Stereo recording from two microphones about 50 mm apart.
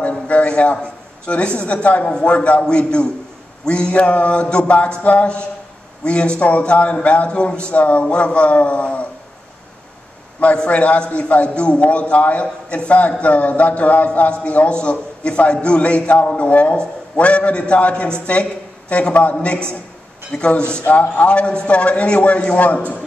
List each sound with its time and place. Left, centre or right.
0.3 s a sound: left
1.2 s a man's voice: left
10.4 s a man's voice: left
20.8 s a man's voice: left